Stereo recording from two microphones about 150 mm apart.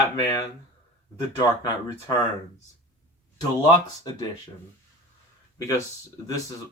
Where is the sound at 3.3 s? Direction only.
25° left (ahead or behind).